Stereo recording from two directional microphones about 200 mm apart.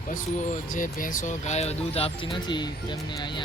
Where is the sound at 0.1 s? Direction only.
40° left (ahead or behind).